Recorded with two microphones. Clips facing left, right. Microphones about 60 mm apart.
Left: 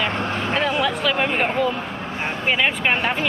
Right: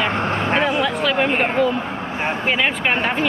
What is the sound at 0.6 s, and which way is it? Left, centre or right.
Music, centre.